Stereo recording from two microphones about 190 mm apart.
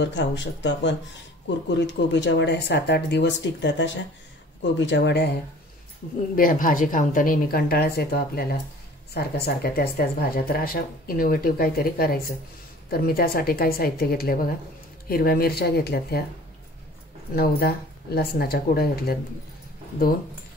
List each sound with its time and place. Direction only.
0.0 s speech: 70° left (ahead or behind)
6.3 s speech: 45° left (ahead or behind)
17.4 s speech: 55° left (ahead or behind)